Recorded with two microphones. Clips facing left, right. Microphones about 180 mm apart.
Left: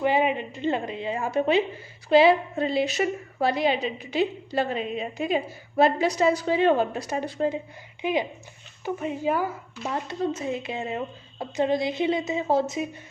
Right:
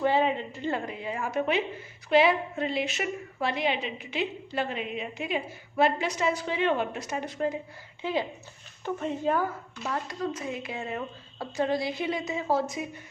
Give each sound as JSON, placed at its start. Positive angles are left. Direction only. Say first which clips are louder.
{"t": 0.0, "sound": "a woman's voice", "louder": "left 2 dB", "side_deg": 15}
{"t": 8.0, "sound": "speech", "louder": "left 4 dB", "side_deg": 15}
{"t": 9.9, "sound": "a woman's voice", "louder": "left 4 dB", "side_deg": 25}